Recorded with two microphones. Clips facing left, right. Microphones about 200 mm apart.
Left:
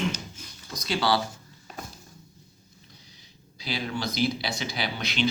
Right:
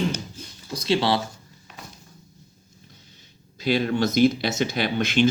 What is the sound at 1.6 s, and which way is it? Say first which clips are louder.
Walk: left 3 dB; 40° left (ahead or behind).